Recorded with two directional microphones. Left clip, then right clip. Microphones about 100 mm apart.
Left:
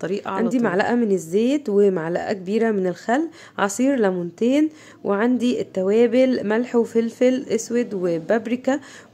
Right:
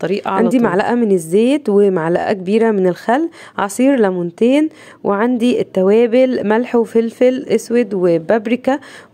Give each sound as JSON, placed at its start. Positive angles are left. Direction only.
{"t": 0.0, "sound": "speech", "side_deg": -35}